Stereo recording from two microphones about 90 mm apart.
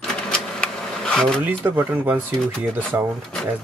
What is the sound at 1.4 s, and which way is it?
Speech, 25° right (ahead or behind).